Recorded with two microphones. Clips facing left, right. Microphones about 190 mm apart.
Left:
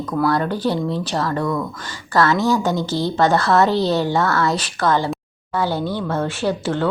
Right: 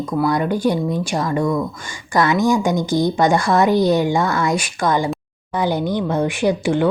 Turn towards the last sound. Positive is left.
turn(degrees=-15)  # may be behind; listen again after turning